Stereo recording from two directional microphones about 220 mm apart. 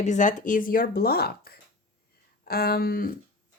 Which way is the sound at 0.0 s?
35° left (ahead or behind).